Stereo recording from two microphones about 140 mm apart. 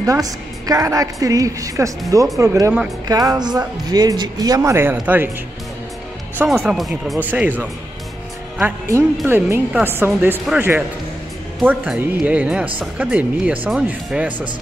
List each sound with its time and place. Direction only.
0.0 s a woman's voice: 25° right (ahead or behind)
6.3 s speech: 15° right (ahead or behind)
6.7 s speech: centre (ahead or behind)
8.8 s a woman's voice: 20° right (ahead or behind)
11.6 s speech: 10° right (ahead or behind)